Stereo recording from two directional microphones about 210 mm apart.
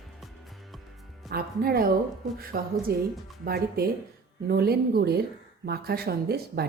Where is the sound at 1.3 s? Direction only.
45° right (ahead or behind).